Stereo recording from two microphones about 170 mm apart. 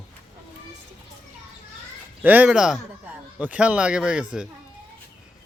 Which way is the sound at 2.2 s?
10° right (ahead or behind).